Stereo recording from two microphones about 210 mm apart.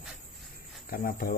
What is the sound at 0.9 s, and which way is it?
Speech, 40° left (ahead or behind).